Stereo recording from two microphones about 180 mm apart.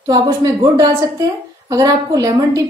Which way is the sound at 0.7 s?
20° right (ahead or behind).